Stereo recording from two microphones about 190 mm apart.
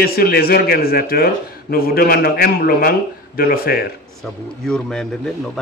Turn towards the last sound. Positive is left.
turn(degrees=0)  # may be behind; listen again after turning